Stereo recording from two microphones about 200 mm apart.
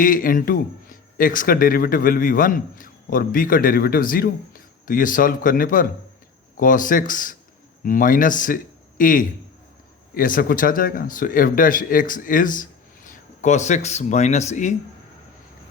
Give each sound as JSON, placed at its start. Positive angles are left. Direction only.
{"t": 0.0, "sound": "a man's voice", "side_deg": 45}